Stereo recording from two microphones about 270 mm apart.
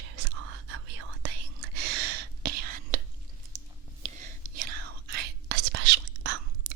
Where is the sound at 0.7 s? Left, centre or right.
Right.